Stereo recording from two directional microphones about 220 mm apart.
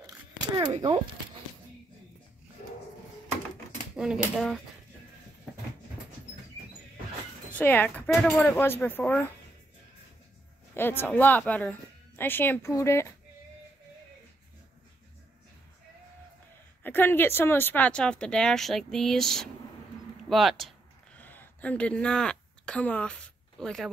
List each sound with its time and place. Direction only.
0.1 s camera: 20° right (ahead or behind)
3.9 s speech: centre (ahead or behind)
7.5 s speech: 10° left (ahead or behind)
10.7 s a woman's voice: 10° left (ahead or behind)
16.8 s speech: 10° left (ahead or behind)
21.2 s a sound: 10° left (ahead or behind)